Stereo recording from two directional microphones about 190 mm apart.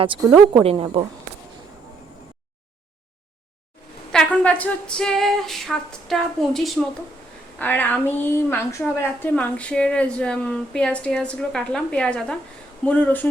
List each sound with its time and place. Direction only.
0.0 s a woman's voice: 25° right (ahead or behind)
4.1 s a sound: 5° left (ahead or behind)
7.6 s a woman's voice: 10° left (ahead or behind)